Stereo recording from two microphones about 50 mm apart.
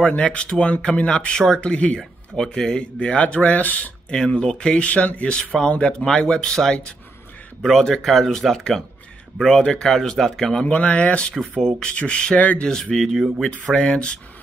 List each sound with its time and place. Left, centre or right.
0.0 s speech: left
4.1 s speech: centre
4.8 s speech: left; by 10.6 s centre
10.6 s speech: left
12.4 s speech: left
12.6 s speech: centre